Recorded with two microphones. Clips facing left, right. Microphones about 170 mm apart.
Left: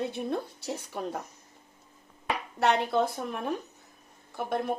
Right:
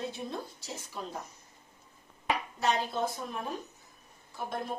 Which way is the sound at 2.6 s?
65° left (ahead or behind).